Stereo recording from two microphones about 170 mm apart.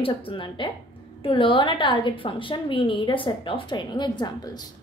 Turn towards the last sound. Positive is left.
turn(degrees=25)  # may be behind; listen again after turning